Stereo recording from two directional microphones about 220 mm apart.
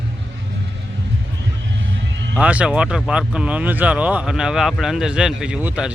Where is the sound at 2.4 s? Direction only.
5° right (ahead or behind).